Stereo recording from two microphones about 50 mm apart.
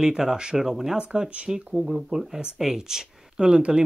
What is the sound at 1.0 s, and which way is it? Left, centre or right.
Speech, right.